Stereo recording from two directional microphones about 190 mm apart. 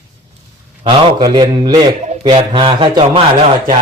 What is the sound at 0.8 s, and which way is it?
Speech, 25° right (ahead or behind).